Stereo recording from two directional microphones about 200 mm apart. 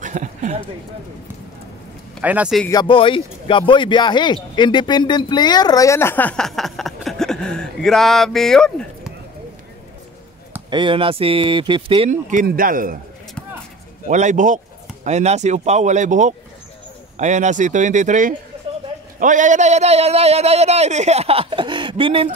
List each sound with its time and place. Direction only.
0.0 s speech: 40° right (ahead or behind)
2.2 s speech: 5° right (ahead or behind)
2.7 s speech: 25° left (ahead or behind); by 9.1 s 5° left (ahead or behind)
10.7 s speech: 25° right (ahead or behind)
12.1 s a man's voice: 40° right (ahead or behind)
14.0 s a man's voice: 40° right (ahead or behind)